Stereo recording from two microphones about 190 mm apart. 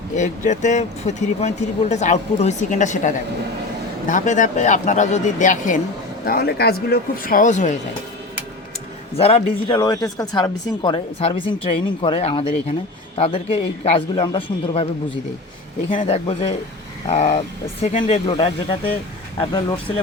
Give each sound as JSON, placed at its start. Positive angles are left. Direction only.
{"t": 0.2, "sound": "speech", "side_deg": 40}
{"t": 6.2, "sound": "speech", "side_deg": 55}
{"t": 9.1, "sound": "speech", "side_deg": 30}
{"t": 15.9, "sound": "speech", "side_deg": 30}